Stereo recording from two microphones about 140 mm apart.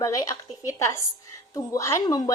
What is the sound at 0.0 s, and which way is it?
A woman's voice, 20° left (ahead or behind).